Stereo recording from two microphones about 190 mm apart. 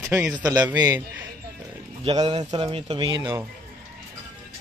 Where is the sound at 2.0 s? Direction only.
30° right (ahead or behind).